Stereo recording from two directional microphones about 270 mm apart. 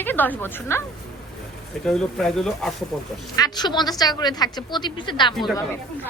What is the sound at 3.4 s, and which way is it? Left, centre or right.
A woman's voice, centre.